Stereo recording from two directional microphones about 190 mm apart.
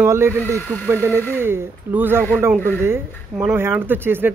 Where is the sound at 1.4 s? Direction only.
10° right (ahead or behind).